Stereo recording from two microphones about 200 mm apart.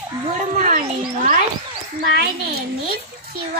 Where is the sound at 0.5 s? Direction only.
40° right (ahead or behind).